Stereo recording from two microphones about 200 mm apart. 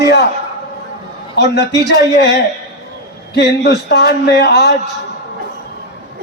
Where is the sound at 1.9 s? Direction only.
60° left (ahead or behind).